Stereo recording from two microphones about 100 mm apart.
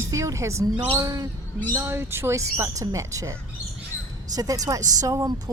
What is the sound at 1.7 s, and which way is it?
Speech, 25° right (ahead or behind).